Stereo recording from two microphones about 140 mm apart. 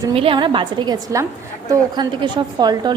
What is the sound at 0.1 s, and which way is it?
A woman's voice, 40° right (ahead or behind).